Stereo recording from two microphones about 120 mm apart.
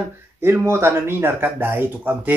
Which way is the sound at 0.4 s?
20° right (ahead or behind).